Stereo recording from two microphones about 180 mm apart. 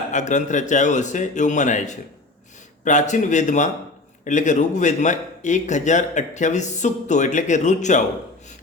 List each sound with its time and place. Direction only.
0.1 s a man's voice: 40° left (ahead or behind)